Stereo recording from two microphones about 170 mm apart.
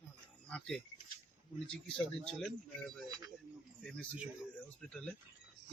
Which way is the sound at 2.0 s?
5° left (ahead or behind).